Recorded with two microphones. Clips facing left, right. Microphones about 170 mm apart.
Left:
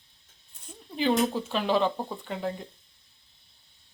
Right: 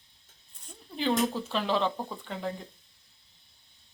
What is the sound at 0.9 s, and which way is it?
A woman's voice, 5° left (ahead or behind).